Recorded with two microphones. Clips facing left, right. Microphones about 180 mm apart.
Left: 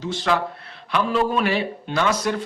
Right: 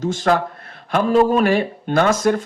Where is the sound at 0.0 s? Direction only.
45° right (ahead or behind).